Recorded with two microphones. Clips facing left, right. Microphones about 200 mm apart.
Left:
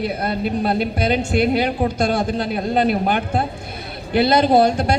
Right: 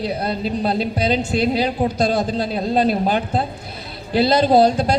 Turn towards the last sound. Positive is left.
turn(degrees=55)  # may be behind; listen again after turning